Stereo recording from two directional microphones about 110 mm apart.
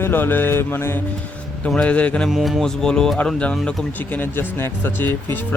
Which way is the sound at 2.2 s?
Centre (ahead or behind).